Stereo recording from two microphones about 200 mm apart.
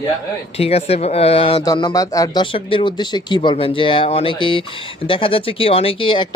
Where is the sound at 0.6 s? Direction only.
30° left (ahead or behind).